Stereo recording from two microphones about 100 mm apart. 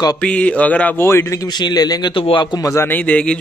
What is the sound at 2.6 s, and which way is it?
Speech, 30° left (ahead or behind).